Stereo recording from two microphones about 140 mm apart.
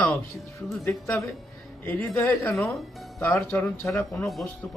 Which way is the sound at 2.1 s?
15° left (ahead or behind).